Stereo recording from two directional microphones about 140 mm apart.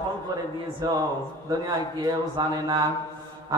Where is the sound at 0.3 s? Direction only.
30° right (ahead or behind).